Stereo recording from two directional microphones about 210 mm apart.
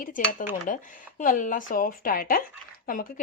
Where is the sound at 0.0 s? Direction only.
40° left (ahead or behind).